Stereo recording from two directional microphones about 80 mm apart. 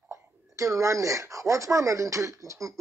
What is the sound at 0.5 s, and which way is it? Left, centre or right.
Speech, right.